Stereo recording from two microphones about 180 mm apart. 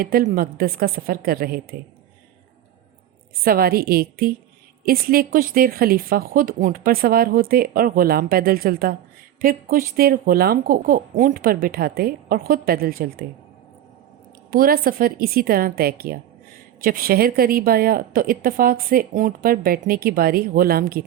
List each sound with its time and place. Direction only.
0.0 s a woman's voice: 55° right (ahead or behind)
3.4 s a woman's voice: 55° right (ahead or behind)
14.5 s a woman's voice: 55° right (ahead or behind)